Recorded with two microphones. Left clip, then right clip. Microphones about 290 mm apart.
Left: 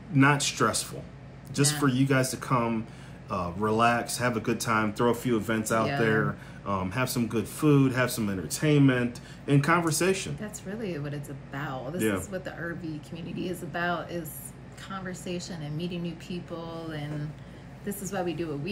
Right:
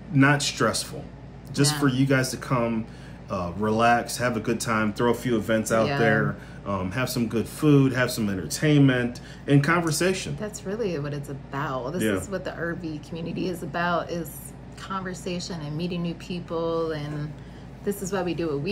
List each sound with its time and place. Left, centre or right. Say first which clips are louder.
0.1 s speech: right 2 dB; centre
10.4 s a woman's voice: right 7 dB; centre